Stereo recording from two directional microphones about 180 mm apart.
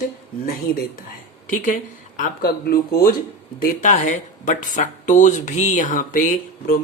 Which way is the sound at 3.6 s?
45° left (ahead or behind).